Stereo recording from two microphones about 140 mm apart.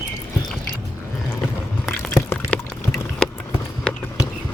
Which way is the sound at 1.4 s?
5° left (ahead or behind).